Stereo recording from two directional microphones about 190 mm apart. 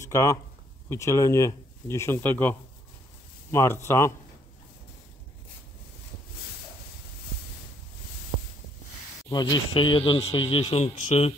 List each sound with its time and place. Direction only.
0.0 s speech: 15° left (ahead or behind)
3.5 s speech: 15° left (ahead or behind)
9.3 s speech: 20° left (ahead or behind)